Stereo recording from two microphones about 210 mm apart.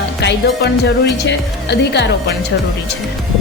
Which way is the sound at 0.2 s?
55° left (ahead or behind).